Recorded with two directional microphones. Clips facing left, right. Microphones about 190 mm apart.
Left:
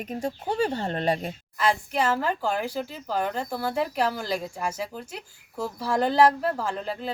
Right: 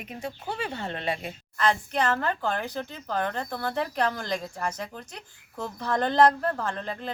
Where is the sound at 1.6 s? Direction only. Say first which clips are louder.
Left 1 dB; 5° left (ahead or behind).